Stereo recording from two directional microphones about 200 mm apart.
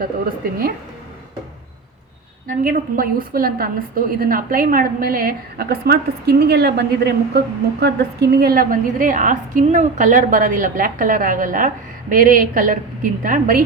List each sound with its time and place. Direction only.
2.5 s a woman's voice: 45° right (ahead or behind)